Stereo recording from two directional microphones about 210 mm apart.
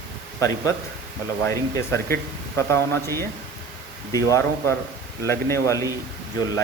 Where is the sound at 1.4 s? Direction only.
10° left (ahead or behind).